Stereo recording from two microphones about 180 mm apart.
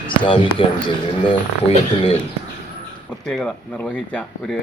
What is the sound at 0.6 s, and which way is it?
Speech, 30° left (ahead or behind).